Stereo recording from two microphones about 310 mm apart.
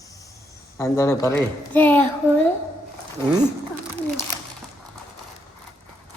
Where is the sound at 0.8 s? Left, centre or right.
Centre.